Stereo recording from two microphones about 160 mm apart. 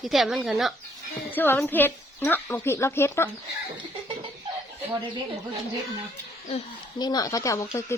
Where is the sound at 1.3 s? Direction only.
10° left (ahead or behind).